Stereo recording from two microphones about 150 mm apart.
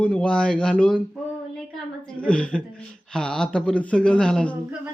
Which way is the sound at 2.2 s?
5° left (ahead or behind).